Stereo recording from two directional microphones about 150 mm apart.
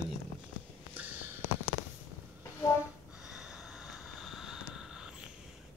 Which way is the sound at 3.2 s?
5° right (ahead or behind).